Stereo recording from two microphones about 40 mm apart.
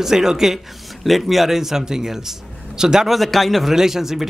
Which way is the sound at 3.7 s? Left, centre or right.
Centre.